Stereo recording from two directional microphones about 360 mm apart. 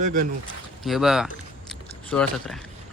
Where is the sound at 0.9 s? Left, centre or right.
Centre.